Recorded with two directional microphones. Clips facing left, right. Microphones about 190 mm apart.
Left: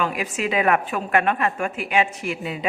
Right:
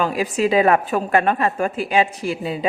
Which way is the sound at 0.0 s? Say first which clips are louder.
Right 5 dB; 35° right (ahead or behind).